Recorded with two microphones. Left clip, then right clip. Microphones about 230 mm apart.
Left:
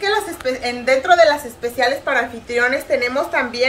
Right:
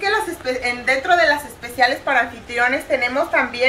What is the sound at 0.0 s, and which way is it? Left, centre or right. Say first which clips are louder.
A woman's voice: left 1 dB; centre.